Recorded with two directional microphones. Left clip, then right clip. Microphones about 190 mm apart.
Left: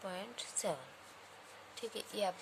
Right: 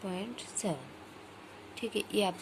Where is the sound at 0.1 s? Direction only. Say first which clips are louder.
Right 4 dB; 10° left (ahead or behind).